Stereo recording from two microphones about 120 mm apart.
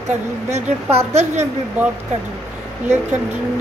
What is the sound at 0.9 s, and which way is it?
Speech, 70° right (ahead or behind).